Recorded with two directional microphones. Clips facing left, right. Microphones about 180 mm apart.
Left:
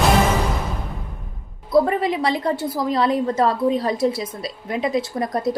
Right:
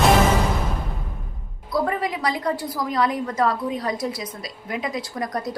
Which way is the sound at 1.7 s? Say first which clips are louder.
Left 6 dB; 25° left (ahead or behind).